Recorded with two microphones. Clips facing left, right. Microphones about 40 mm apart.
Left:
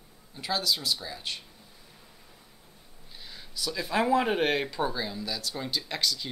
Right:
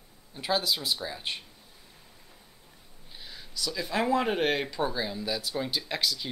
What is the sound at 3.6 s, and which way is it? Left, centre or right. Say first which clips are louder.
Speech: left 1 dB; centre.